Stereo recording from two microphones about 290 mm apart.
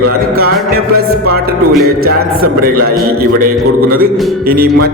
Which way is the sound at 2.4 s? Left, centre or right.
Right.